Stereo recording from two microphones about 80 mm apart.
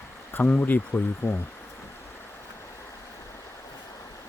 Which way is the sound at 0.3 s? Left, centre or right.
Left.